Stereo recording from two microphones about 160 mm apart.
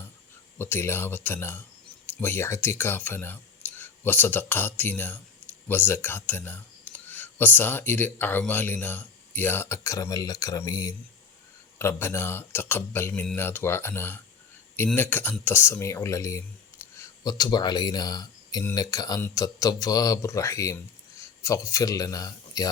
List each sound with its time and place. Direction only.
0.6 s speech: 15° left (ahead or behind)